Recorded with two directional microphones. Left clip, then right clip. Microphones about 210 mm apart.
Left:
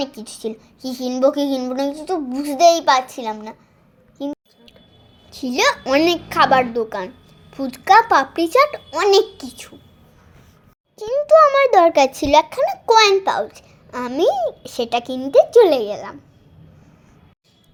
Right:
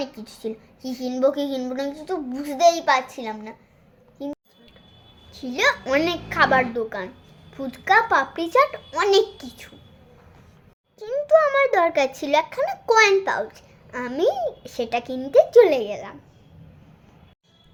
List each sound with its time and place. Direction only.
0.0 s a child's voice: 30° left (ahead or behind)
5.4 s a child's voice: 30° left (ahead or behind)
10.9 s a child's voice: 25° left (ahead or behind)